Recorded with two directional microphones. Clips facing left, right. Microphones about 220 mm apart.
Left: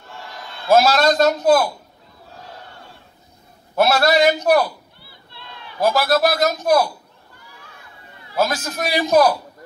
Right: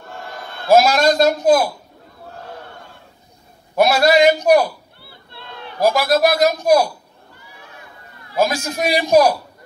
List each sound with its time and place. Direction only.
0.0 s a sound: 55° right (ahead or behind)
0.7 s speech: 10° right (ahead or behind)
3.7 s speech: 10° right (ahead or behind)
5.3 s a sound: 55° right (ahead or behind)
5.9 s speech: 10° right (ahead or behind)
8.4 s speech: 10° right (ahead or behind)